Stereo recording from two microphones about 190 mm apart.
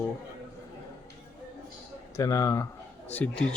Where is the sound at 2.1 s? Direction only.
15° left (ahead or behind).